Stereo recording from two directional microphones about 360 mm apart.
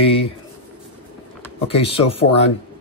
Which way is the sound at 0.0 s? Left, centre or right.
Centre.